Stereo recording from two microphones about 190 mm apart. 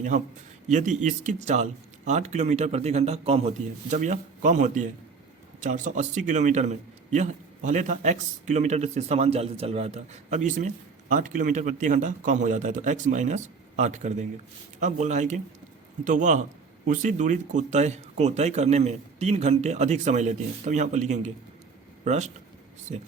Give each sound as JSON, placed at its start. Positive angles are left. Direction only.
{"t": 0.7, "sound": "a man's voice", "side_deg": -40}